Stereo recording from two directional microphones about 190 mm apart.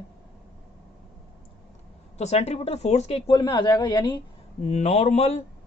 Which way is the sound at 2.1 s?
35° left (ahead or behind).